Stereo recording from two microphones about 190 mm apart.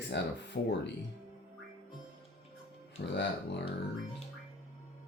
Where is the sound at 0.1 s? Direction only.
65° left (ahead or behind).